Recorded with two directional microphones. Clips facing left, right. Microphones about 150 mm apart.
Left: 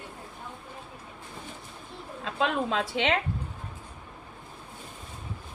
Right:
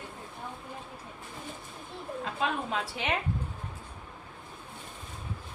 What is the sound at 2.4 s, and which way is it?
Speech, 90° left.